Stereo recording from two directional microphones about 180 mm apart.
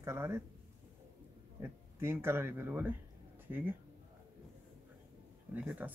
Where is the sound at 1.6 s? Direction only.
10° right (ahead or behind).